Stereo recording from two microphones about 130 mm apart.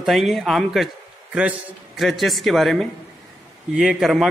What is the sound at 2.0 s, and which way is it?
A man's voice, centre (ahead or behind).